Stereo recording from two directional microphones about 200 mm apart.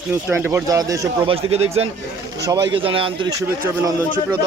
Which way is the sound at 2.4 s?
20° right (ahead or behind).